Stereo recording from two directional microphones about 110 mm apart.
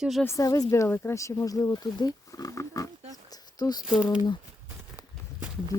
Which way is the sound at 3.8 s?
5° right (ahead or behind).